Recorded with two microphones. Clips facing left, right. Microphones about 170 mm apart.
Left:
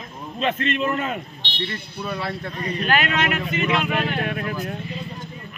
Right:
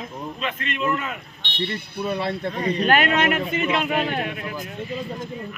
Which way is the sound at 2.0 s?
25° right (ahead or behind).